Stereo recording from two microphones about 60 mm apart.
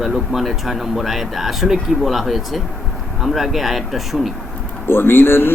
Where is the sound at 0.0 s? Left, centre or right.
Centre.